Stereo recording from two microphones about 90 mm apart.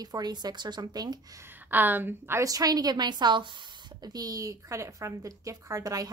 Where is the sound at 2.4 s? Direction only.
40° right (ahead or behind); by 3.5 s 55° right (ahead or behind).